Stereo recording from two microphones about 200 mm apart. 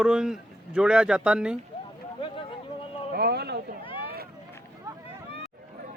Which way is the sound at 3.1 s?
55° right (ahead or behind).